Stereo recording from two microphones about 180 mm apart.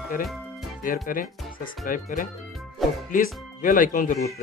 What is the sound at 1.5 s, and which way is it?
Music, 50° left (ahead or behind).